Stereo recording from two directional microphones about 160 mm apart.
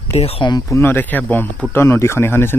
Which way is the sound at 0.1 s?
40° left (ahead or behind).